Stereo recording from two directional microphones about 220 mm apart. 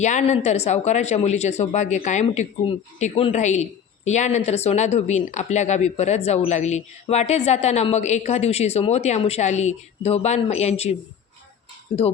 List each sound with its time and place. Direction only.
0.0 s speech: 30° left (ahead or behind)